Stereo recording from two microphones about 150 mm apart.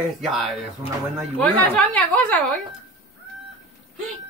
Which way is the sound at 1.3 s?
10° left (ahead or behind).